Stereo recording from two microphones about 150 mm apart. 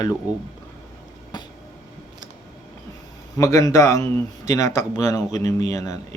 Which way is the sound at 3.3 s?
20° left (ahead or behind).